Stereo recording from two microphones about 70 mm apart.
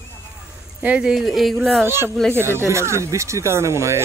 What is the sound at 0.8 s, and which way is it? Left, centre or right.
Speech, centre.